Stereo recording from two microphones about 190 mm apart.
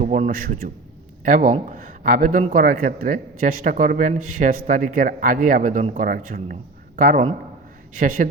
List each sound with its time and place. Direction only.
0.0 s a man's voice: 40° right (ahead or behind)